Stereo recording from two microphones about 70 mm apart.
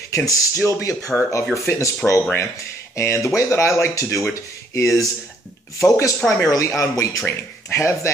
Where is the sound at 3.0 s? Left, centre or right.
Left.